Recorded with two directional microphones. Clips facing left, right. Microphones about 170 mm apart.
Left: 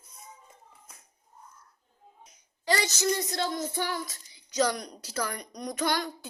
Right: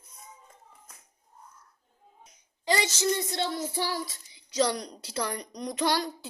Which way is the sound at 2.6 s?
20° right (ahead or behind).